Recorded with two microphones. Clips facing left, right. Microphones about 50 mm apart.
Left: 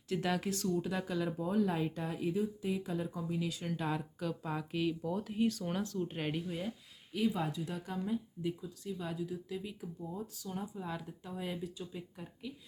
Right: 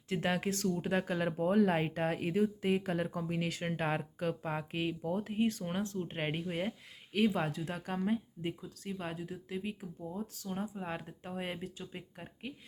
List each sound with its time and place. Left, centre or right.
0.1 s speech: right